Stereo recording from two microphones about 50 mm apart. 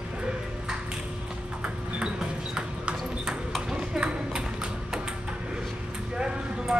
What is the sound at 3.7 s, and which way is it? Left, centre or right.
Clip-clop, centre.